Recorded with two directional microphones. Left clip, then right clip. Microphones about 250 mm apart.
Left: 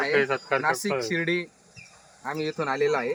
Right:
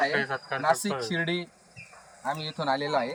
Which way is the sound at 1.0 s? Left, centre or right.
Centre.